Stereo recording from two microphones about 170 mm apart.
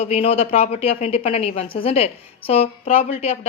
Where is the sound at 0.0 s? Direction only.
35° left (ahead or behind).